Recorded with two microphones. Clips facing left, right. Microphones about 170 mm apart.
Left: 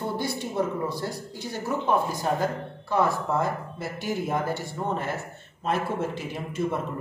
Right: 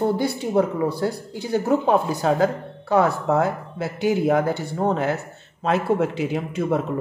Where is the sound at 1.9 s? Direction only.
75° right (ahead or behind).